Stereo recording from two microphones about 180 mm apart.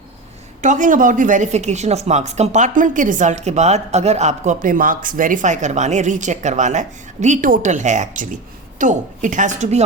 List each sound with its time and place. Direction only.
0.6 s speech: 45° right (ahead or behind)